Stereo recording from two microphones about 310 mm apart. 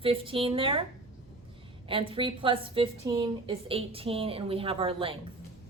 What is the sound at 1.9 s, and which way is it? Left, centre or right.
A woman's voice, centre.